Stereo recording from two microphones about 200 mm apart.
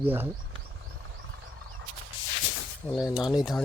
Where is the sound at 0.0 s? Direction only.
10° right (ahead or behind).